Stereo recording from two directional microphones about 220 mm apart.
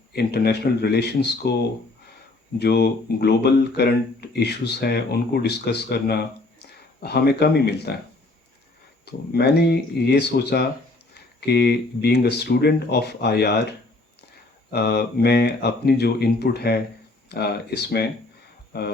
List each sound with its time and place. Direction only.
0.1 s speech: 45° left (ahead or behind)
2.6 s speech: 45° left (ahead or behind)
9.0 s speech: 45° left (ahead or behind)